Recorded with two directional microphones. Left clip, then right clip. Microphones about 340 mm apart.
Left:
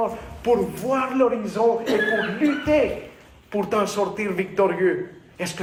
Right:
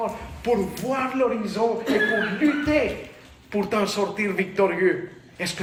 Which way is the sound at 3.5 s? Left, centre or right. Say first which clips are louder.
Left 1 dB; centre.